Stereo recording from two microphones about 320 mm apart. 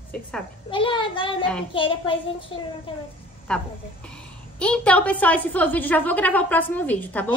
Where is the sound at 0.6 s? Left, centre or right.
Centre.